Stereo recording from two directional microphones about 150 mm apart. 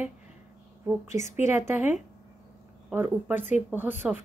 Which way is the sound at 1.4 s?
15° right (ahead or behind).